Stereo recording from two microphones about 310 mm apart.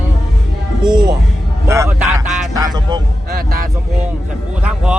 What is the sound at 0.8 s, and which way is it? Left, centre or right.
Music, centre.